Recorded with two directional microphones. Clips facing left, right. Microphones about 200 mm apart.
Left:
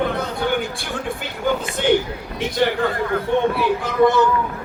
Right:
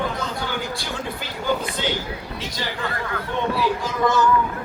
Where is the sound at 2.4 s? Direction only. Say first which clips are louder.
Left 14 dB; 60° left (ahead or behind).